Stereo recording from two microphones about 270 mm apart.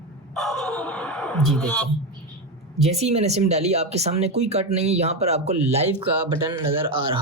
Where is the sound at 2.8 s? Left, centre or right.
Right.